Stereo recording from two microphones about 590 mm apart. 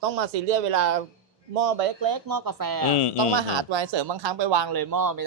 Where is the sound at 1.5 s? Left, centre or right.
Right.